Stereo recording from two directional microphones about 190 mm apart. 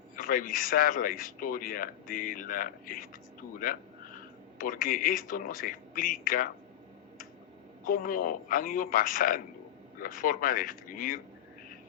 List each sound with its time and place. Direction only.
0.2 s speech: 45° left (ahead or behind)
4.5 s speech: 45° left (ahead or behind)
7.9 s speech: 50° left (ahead or behind)